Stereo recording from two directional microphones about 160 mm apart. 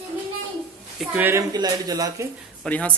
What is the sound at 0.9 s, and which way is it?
Speech, 10° right (ahead or behind).